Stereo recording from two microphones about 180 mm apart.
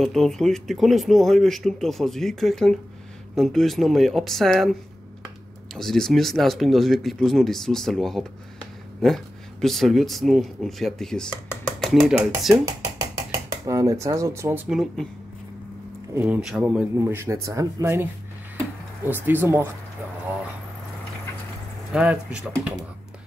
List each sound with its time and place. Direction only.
0.0 s speech: centre (ahead or behind)
5.8 s speech: centre (ahead or behind)
13.7 s speech: 15° right (ahead or behind)
14.7 s speech: centre (ahead or behind)
16.2 s speech: 5° right (ahead or behind)
19.0 s speech: 10° right (ahead or behind)
21.9 s speech: 5° right (ahead or behind)